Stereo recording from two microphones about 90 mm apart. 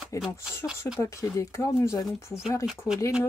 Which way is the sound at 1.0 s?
35° left (ahead or behind).